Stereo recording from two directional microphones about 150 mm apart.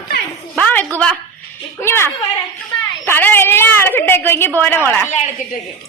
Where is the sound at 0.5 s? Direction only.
10° left (ahead or behind).